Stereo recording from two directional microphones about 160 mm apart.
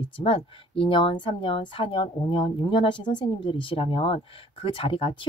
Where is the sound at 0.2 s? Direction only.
35° left (ahead or behind).